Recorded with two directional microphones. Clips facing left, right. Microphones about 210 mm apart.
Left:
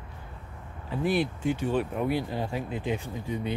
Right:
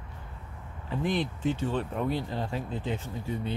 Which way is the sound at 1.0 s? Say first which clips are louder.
Left 3 dB; 10° left (ahead or behind).